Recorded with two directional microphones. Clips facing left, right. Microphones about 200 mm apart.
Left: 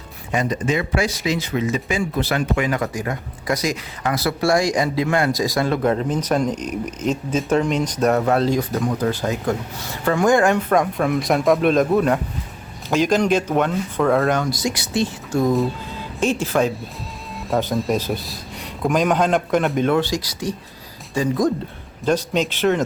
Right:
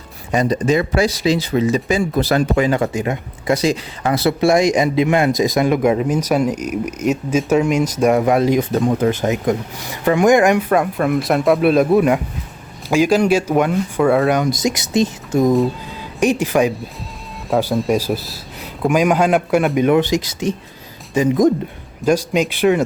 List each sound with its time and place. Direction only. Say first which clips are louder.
0.3 s speech: right 5 dB; 35° right (ahead or behind); by 8.6 s 15° right (ahead or behind)
8.7 s speech: right 5 dB; 25° right (ahead or behind)
10.7 s a man's voice: right 2 dB; 5° right (ahead or behind)